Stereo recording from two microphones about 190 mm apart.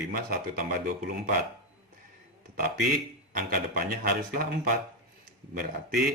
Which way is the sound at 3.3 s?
50° right (ahead or behind).